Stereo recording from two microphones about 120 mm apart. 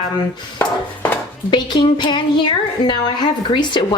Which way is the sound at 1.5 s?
40° left (ahead or behind).